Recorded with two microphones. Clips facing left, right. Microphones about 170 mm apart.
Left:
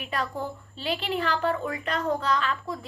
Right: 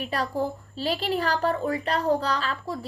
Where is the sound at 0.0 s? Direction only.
35° right (ahead or behind).